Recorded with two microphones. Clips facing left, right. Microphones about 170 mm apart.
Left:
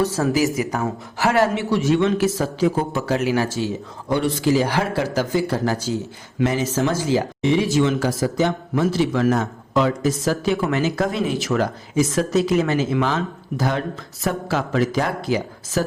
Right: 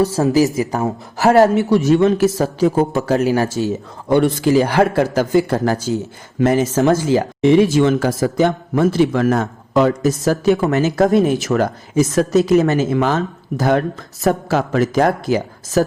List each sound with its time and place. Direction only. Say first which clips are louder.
0.3 s speech: right 5 dB; 35° right (ahead or behind)